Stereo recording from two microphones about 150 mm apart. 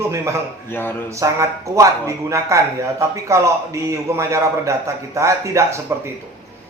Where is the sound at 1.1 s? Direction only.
20° right (ahead or behind).